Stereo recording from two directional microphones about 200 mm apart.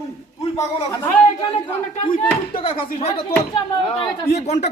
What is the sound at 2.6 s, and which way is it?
A man's voice, 30° left (ahead or behind).